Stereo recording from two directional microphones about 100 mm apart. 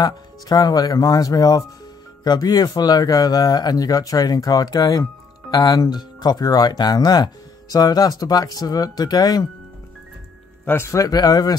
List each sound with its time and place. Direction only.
0.0 s speech: 40° left (ahead or behind)
10.6 s speech: 25° left (ahead or behind); by 11.5 s 40° left (ahead or behind)